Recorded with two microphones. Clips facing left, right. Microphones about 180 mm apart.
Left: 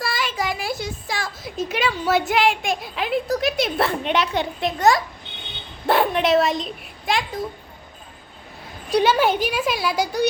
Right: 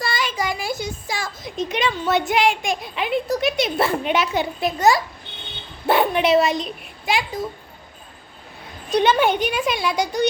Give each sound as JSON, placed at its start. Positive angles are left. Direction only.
{"t": 0.0, "sound": "a woman's voice", "side_deg": 0}
{"t": 8.9, "sound": "a woman's voice", "side_deg": 5}